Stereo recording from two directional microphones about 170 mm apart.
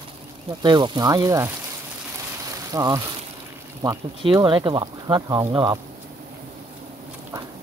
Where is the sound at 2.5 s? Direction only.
20° right (ahead or behind).